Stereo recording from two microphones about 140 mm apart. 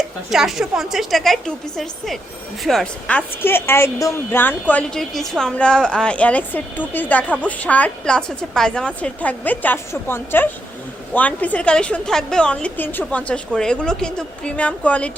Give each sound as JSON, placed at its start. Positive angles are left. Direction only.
{"t": 0.3, "sound": "a woman's voice", "side_deg": 0}